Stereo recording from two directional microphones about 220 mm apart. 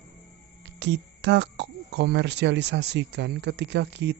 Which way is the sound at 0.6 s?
50° right (ahead or behind).